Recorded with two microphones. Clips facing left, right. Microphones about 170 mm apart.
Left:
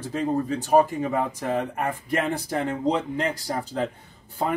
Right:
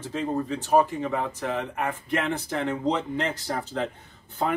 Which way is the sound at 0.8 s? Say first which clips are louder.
Left 2 dB; 45° left (ahead or behind).